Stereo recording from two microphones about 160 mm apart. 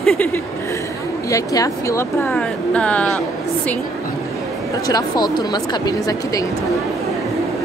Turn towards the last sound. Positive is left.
turn(degrees=20)  # may be behind; listen again after turning